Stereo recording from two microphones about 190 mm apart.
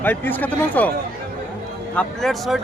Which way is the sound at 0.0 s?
10° left (ahead or behind).